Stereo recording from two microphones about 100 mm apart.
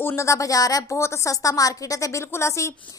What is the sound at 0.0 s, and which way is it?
A woman's voice, 30° left (ahead or behind).